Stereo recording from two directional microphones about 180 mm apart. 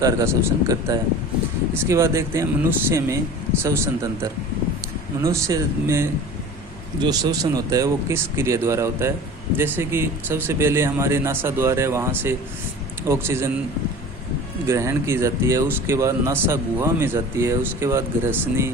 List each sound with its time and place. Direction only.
0.0 s speech: 20° right (ahead or behind)
14.7 s speech: 15° right (ahead or behind)